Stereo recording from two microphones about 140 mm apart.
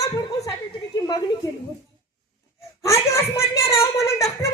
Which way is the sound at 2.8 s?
20° left (ahead or behind).